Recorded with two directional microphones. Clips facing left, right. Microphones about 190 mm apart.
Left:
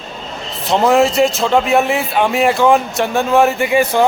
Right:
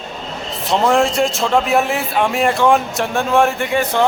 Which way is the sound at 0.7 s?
5° left (ahead or behind).